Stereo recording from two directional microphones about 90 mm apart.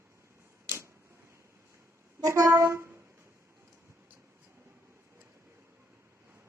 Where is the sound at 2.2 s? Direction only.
35° right (ahead or behind).